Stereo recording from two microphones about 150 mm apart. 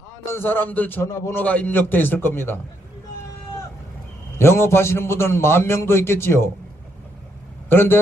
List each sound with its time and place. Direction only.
0.3 s a man's voice: 15° left (ahead or behind)
4.4 s a man's voice: 15° left (ahead or behind)
7.7 s a man's voice: 15° left (ahead or behind)